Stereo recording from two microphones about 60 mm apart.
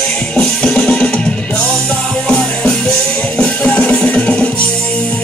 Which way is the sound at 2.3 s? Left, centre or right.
Centre.